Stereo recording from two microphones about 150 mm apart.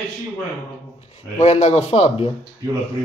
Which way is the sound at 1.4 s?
50° left (ahead or behind).